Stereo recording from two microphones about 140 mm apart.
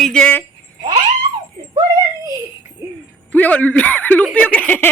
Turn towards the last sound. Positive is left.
turn(degrees=10)  # may be behind; listen again after turning